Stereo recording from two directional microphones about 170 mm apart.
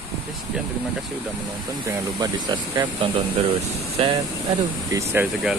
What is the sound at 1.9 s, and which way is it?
Speech, 20° right (ahead or behind).